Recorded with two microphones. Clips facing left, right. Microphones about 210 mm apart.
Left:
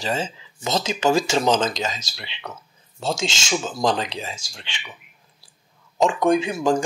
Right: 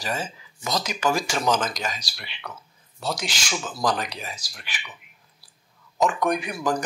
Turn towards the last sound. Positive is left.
turn(degrees=25)  # may be behind; listen again after turning